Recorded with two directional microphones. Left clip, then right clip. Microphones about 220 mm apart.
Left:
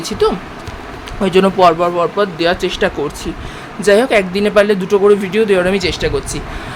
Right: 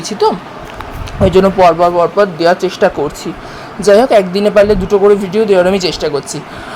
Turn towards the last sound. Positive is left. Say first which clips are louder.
# right 2 dB
turn(degrees=-10)  # may be behind; listen again after turning